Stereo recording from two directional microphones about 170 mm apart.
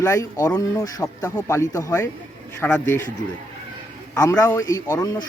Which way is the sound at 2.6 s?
5° left (ahead or behind).